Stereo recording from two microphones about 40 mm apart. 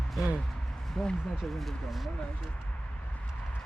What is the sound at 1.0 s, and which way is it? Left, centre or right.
Speech, centre.